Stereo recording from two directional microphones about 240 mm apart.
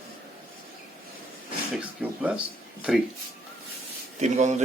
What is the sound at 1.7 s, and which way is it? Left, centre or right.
Speech, centre.